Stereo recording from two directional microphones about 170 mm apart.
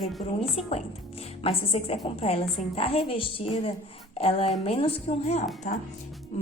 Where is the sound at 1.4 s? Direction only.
35° left (ahead or behind).